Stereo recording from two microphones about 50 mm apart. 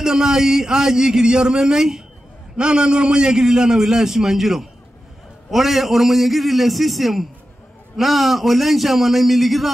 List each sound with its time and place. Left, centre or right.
0.0 s a man's voice: centre